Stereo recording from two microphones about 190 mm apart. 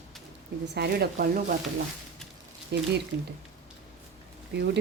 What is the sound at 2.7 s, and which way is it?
Speech, 60° right (ahead or behind).